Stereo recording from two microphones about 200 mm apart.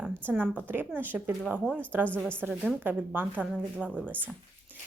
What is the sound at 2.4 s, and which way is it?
A woman's voice, 10° right (ahead or behind).